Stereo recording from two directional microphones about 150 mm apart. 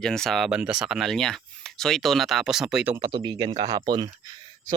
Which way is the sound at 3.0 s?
30° right (ahead or behind).